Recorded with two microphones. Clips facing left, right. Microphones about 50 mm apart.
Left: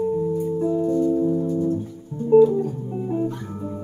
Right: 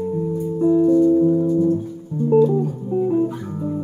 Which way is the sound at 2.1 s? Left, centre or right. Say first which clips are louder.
Left 1 dB; centre.